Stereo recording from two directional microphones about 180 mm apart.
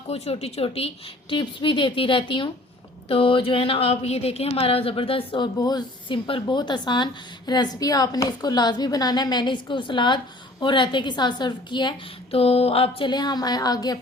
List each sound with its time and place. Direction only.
0.1 s speech: 35° left (ahead or behind)